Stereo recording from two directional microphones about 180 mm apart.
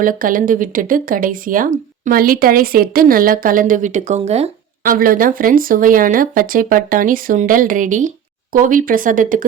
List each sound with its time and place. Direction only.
0.0 s speech: 50° right (ahead or behind)
4.8 s speech: 50° right (ahead or behind)